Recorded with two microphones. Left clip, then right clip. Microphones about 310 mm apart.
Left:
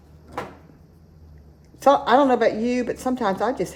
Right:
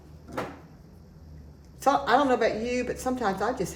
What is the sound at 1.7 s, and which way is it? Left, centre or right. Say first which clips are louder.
A woman's voice: left 6 dB; left.